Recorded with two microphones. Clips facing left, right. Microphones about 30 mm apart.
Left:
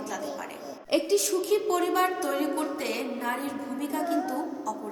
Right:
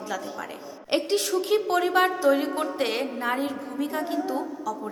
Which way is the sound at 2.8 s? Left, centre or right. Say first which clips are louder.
Right 4 dB; right.